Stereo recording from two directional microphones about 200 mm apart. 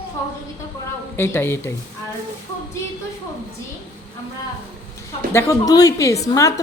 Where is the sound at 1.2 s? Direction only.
10° left (ahead or behind).